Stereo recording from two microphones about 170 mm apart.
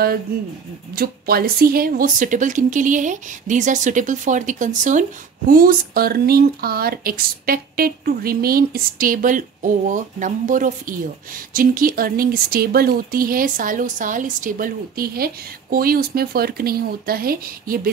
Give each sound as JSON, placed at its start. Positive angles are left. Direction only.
{"t": 0.9, "sound": "a woman's voice", "side_deg": -60}
{"t": 5.5, "sound": "speech", "side_deg": -55}